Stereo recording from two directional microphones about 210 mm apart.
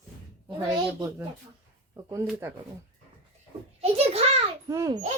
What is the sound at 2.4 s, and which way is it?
Speech, 10° right (ahead or behind).